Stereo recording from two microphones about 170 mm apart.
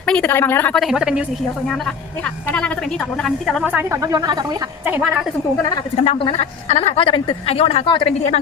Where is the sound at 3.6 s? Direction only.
10° right (ahead or behind).